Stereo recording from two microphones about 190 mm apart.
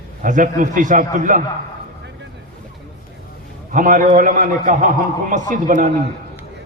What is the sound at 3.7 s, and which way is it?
A man's voice, 45° right (ahead or behind).